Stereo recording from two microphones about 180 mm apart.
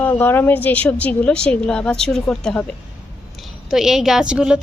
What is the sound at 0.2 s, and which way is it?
A woman's voice, 10° left (ahead or behind).